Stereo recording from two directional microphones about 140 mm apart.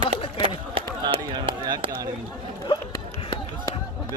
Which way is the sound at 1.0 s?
30° right (ahead or behind).